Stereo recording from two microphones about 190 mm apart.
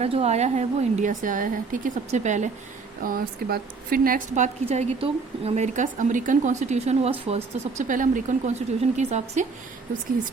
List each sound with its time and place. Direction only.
0.0 s a woman's voice: 35° right (ahead or behind)
4.7 s a woman's voice: 35° right (ahead or behind)